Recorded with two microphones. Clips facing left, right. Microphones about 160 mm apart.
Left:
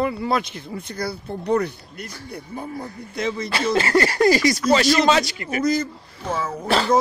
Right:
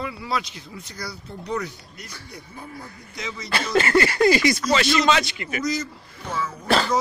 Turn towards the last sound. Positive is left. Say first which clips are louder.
# left 4 dB
turn(degrees=50)  # may be behind; listen again after turning